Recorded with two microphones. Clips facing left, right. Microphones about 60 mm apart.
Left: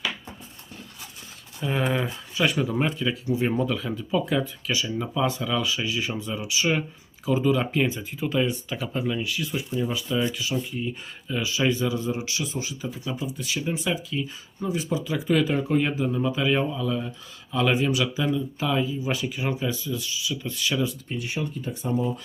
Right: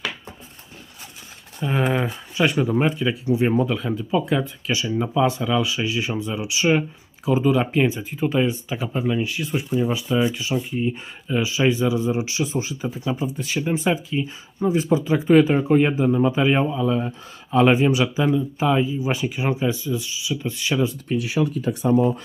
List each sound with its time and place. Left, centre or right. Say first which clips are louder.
1.6 s speech: right 3 dB; centre
2.3 s speech: right 4 dB; centre
21.1 s speech: right 8 dB; right